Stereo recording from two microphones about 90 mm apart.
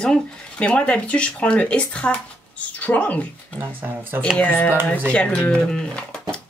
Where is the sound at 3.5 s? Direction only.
20° right (ahead or behind).